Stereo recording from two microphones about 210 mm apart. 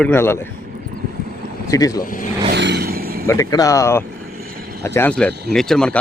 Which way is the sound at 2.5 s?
55° right (ahead or behind).